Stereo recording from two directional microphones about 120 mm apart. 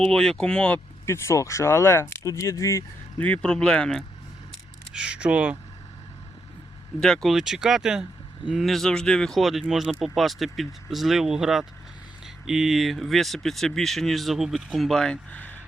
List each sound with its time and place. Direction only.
0.0 s speech: 5° left (ahead or behind)
1.0 s speech: 25° left (ahead or behind)
3.2 s speech: 10° left (ahead or behind)
4.9 s speech: 10° right (ahead or behind)
7.0 s speech: 5° left (ahead or behind)